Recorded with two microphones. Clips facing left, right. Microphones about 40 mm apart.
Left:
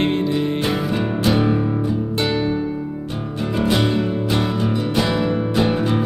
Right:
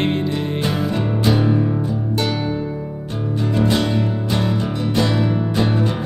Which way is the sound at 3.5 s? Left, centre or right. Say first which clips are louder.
Left 1 dB; centre.